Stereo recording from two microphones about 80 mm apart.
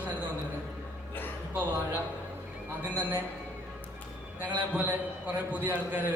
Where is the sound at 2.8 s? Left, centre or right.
Right.